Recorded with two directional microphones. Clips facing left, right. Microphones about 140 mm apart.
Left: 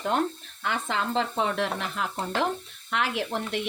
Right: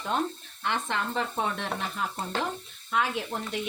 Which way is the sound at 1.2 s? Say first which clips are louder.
Left 4 dB; 90° left.